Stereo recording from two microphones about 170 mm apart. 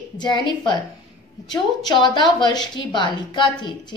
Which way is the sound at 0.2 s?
25° left (ahead or behind).